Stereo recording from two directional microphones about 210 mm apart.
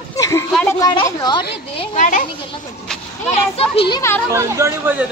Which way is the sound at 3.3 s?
25° left (ahead or behind).